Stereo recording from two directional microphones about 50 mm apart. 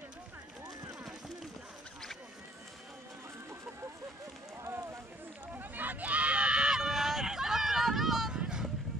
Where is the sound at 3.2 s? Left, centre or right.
Right.